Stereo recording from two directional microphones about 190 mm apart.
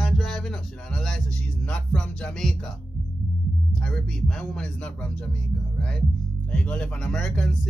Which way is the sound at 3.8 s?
5° left (ahead or behind).